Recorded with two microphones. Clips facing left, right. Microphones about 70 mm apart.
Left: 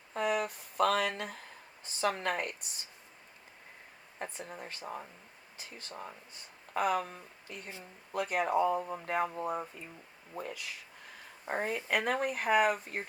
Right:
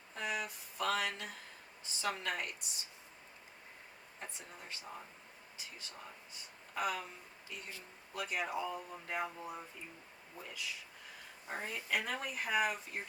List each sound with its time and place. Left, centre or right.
0.1 s a sound: left
1.8 s speech: left
4.2 s speech: left